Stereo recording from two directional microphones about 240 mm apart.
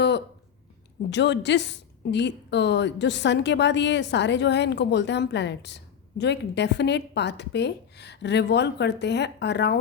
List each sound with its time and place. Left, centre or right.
1.1 s a woman's voice: left